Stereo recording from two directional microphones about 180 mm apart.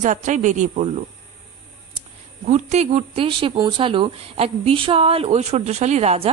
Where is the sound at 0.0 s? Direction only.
45° right (ahead or behind).